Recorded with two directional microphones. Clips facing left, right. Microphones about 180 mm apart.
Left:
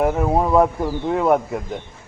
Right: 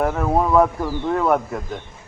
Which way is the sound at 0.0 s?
15° left (ahead or behind).